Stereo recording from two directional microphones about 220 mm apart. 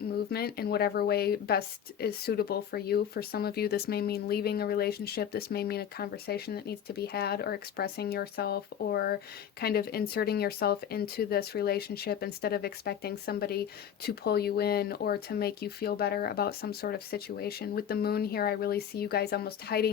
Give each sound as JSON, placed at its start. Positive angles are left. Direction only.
{"t": 0.3, "sound": "speech", "side_deg": 45}